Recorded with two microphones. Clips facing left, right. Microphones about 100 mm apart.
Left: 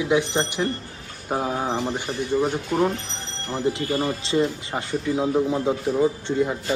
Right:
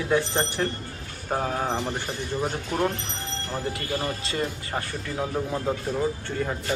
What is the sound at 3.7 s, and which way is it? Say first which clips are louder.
Speech: left 5 dB; 25° left (ahead or behind).